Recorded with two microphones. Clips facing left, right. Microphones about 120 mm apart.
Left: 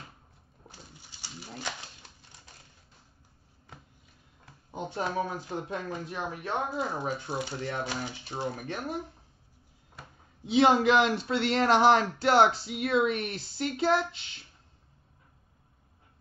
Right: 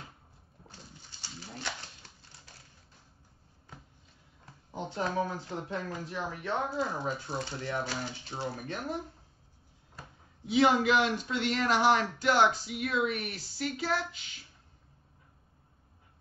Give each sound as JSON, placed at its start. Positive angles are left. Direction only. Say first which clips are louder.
{"t": 4.6, "sound": "speech", "louder": "left 1 dB", "side_deg": 20}
{"t": 10.4, "sound": "speech", "louder": "left 3 dB", "side_deg": 25}